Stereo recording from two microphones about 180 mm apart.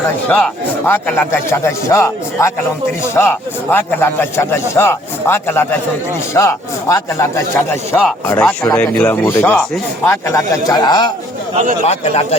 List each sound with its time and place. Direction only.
0.3 s a man's voice: 5° left (ahead or behind); by 11.1 s 25° left (ahead or behind)
11.5 s speech: 45° right (ahead or behind)
11.9 s speech: 35° left (ahead or behind)